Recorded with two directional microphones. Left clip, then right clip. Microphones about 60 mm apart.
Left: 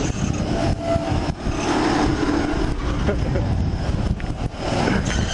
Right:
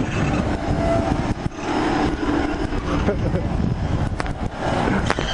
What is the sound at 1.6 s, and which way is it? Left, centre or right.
Vehicle, left.